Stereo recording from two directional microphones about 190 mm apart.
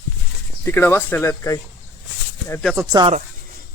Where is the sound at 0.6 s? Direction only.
10° left (ahead or behind).